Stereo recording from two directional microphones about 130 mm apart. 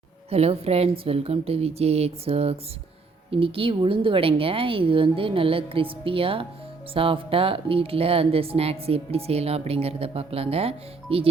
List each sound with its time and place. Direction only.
0.3 s speech: 50° right (ahead or behind)